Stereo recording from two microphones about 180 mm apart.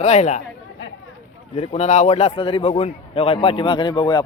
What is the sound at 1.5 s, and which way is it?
A man's voice, 35° left (ahead or behind).